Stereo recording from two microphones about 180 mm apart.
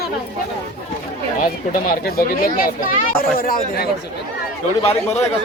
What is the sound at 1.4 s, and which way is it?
Speech, 55° left (ahead or behind).